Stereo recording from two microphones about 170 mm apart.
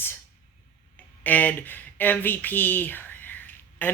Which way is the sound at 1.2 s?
10° left (ahead or behind).